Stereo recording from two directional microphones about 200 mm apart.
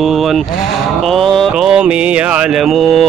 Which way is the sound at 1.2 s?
Centre (ahead or behind).